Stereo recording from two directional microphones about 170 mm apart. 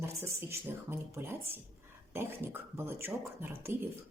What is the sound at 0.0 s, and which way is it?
Speech, 15° right (ahead or behind).